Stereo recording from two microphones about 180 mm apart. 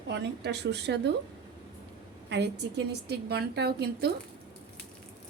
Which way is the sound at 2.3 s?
70° right (ahead or behind).